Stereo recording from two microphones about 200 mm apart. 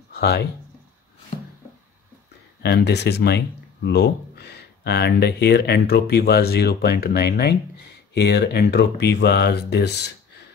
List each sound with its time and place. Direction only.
0.1 s speech: 55° left (ahead or behind)
2.6 s speech: 55° left (ahead or behind)